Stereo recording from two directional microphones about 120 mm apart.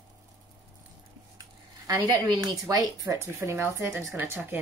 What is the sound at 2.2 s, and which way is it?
Speech, 30° right (ahead or behind).